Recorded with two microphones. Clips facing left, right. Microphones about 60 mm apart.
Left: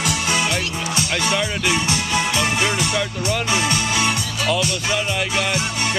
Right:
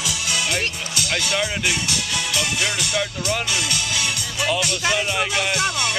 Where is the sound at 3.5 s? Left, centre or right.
Left.